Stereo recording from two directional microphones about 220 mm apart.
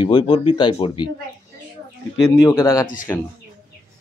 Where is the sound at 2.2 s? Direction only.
10° left (ahead or behind).